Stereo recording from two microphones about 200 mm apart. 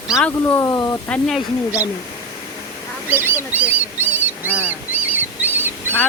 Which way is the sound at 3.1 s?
10° right (ahead or behind).